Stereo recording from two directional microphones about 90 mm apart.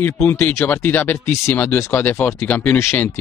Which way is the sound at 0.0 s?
30° left (ahead or behind).